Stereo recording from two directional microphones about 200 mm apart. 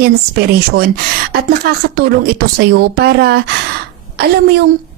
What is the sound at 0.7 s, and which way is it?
Speech, 50° right (ahead or behind).